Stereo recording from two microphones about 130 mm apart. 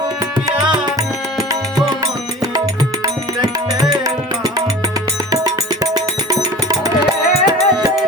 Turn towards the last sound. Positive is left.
turn(degrees=-30)  # may be behind; listen again after turning